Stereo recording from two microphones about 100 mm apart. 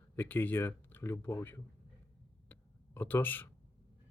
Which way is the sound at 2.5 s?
20° left (ahead or behind).